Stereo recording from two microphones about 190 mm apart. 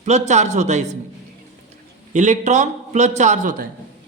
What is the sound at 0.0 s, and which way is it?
Speech, 35° right (ahead or behind).